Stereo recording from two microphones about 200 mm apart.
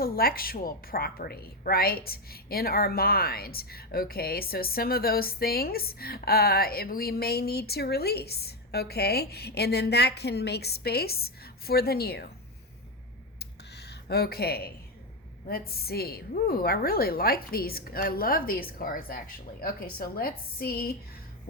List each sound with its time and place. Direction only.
0.0 s a woman's voice: 50° left (ahead or behind)
13.4 s a sound: 55° left (ahead or behind)
15.4 s a woman's voice: 50° left (ahead or behind)